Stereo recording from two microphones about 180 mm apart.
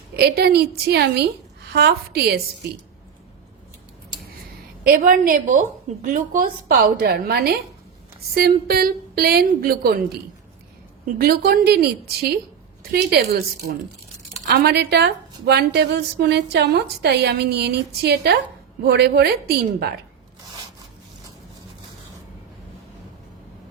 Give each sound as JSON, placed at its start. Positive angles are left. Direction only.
{"t": 0.2, "sound": "a woman's voice", "side_deg": -65}
{"t": 4.8, "sound": "a woman's voice", "side_deg": -55}
{"t": 11.2, "sound": "a woman's voice", "side_deg": -60}
{"t": 14.4, "sound": "a woman's voice", "side_deg": -65}